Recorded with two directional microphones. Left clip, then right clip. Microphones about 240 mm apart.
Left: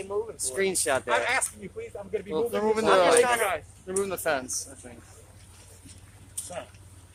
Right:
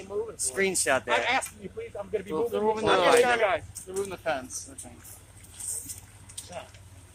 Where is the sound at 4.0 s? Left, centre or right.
Left.